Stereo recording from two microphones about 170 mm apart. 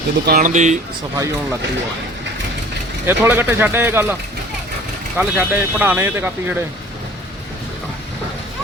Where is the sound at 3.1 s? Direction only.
10° right (ahead or behind).